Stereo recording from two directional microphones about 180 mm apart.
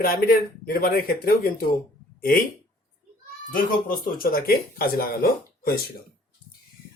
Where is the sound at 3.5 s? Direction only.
55° left (ahead or behind).